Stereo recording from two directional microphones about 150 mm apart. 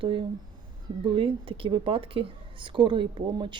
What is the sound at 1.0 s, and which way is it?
A woman's voice, 35° right (ahead or behind).